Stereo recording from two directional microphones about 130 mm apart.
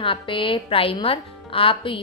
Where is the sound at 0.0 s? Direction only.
40° left (ahead or behind).